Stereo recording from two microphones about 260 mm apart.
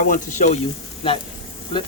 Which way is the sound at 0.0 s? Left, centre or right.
Left.